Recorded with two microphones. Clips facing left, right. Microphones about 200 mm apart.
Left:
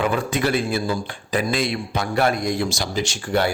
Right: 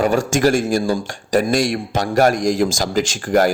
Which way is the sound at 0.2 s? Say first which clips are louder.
Right 5 dB; 85° right.